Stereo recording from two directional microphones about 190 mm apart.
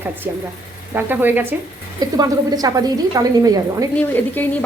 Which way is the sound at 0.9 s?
10° right (ahead or behind).